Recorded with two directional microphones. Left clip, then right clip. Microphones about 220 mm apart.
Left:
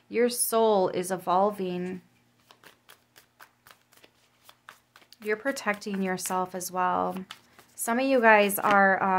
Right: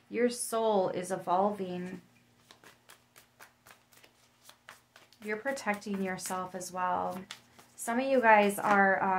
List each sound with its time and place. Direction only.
0.1 s speech: 55° left (ahead or behind)
5.1 s speech: 55° left (ahead or behind)